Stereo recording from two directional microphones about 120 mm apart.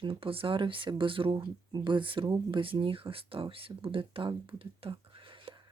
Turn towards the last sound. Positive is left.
turn(degrees=-45)  # may be behind; listen again after turning